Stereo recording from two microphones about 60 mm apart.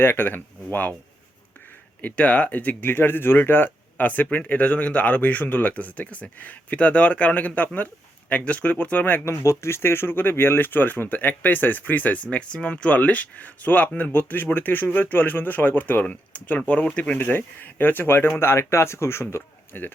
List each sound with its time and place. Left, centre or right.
0.0 s speech: left
2.0 s speech: left
2.9 s speech: left
9.2 s speech: left
17.2 s speech: left
19.7 s speech: left